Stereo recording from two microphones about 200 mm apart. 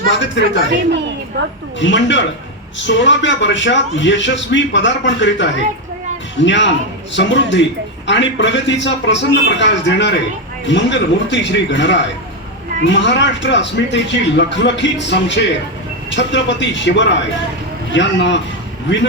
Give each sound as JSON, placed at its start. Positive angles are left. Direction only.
{"t": 0.1, "sound": "a man's voice", "side_deg": 65}
{"t": 1.4, "sound": "a woman's voice", "side_deg": -60}
{"t": 1.8, "sound": "a man's voice", "side_deg": 65}